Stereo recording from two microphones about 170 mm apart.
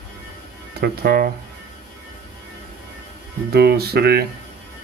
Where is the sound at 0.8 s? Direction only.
65° right (ahead or behind).